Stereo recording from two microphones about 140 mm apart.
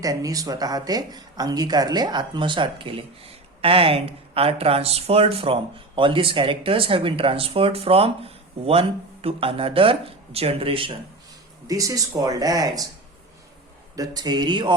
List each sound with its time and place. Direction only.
0.0 s speech: 25° right (ahead or behind); by 10.9 s 40° right (ahead or behind)
11.7 s speech: 25° right (ahead or behind)
13.9 s speech: 25° right (ahead or behind)